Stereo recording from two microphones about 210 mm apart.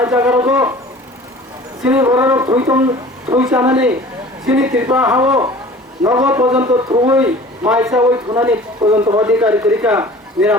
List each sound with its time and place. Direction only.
0.0 s speech: 10° right (ahead or behind)
1.8 s a man's voice: 10° right (ahead or behind)
9.2 s speech: 10° right (ahead or behind)